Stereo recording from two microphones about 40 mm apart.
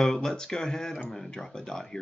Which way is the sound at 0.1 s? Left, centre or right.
Centre.